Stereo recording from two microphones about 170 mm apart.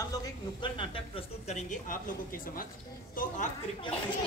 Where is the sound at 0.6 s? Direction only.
30° left (ahead or behind); by 3.5 s 55° left (ahead or behind).